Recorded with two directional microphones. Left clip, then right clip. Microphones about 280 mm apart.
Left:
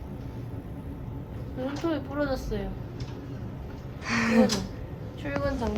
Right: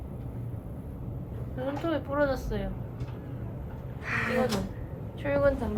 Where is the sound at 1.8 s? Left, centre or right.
Centre.